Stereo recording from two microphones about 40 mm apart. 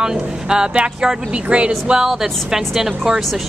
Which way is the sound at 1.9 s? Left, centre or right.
Centre.